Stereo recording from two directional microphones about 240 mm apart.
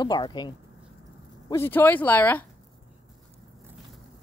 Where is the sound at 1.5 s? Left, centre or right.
Centre.